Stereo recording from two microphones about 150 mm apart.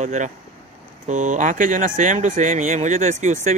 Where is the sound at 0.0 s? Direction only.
55° right (ahead or behind).